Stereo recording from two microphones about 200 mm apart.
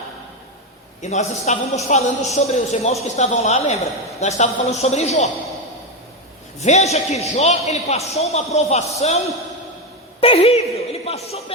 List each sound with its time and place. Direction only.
1.0 s a man's voice: 35° left (ahead or behind)
6.6 s a man's voice: 35° left (ahead or behind)